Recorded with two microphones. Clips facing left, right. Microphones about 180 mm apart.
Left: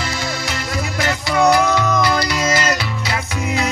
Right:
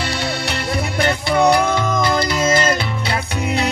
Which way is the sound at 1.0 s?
30° right (ahead or behind).